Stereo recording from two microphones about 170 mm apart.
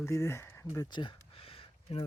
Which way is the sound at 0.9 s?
30° left (ahead or behind).